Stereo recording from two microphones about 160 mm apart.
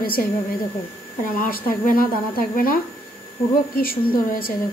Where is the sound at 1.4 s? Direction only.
65° left (ahead or behind).